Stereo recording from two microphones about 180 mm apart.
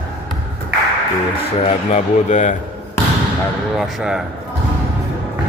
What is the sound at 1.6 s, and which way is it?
Speech, 40° left (ahead or behind).